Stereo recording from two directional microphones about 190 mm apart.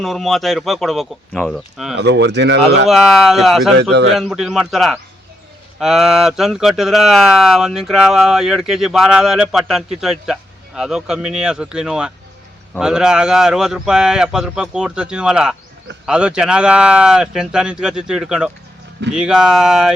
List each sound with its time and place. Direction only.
0.0 s speech: centre (ahead or behind)
2.0 s speech: 65° right (ahead or behind)
2.9 s speech: centre (ahead or behind)